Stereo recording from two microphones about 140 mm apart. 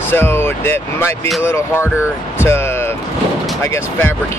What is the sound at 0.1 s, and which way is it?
Speech, 15° left (ahead or behind).